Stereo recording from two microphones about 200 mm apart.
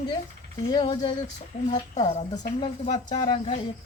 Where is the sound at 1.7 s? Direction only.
35° left (ahead or behind).